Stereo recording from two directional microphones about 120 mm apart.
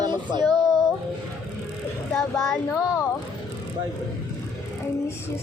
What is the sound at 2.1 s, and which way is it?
Speech, 5° left (ahead or behind).